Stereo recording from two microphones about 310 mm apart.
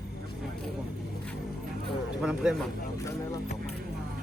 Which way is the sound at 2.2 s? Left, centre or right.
Centre.